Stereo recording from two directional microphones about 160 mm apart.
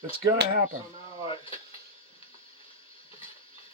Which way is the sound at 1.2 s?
35° left (ahead or behind).